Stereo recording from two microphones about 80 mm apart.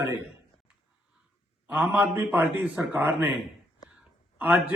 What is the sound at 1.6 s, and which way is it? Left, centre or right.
A man's voice, centre.